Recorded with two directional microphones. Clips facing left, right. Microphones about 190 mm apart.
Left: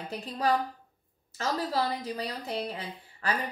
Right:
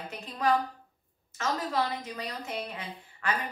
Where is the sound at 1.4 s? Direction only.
35° left (ahead or behind).